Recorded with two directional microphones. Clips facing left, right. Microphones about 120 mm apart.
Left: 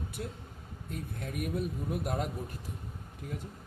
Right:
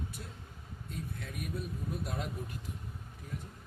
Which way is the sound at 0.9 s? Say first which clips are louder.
Left 4 dB; 50° left (ahead or behind).